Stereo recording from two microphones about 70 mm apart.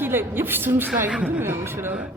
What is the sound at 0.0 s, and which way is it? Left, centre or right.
A woman's voice, right.